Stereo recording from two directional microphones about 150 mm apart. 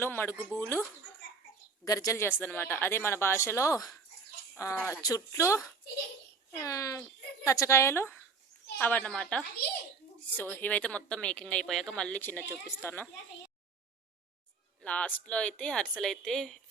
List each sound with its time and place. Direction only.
0.0 s speech: 15° left (ahead or behind)
14.8 s speech: 10° left (ahead or behind)